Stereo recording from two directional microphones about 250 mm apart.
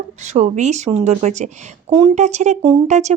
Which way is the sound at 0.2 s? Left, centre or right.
Right.